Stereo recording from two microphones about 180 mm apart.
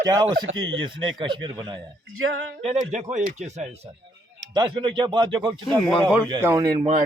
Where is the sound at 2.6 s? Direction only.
35° right (ahead or behind).